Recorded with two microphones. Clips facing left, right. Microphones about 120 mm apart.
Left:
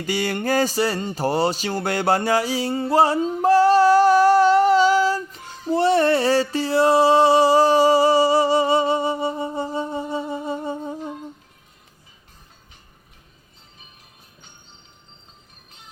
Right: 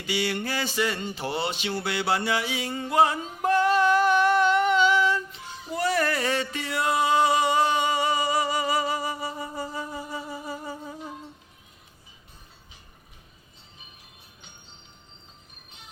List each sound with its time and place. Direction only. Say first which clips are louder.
0.0 s music: left 5 dB; 45° left (ahead or behind)
5.7 s music: left 8 dB; 30° left (ahead or behind)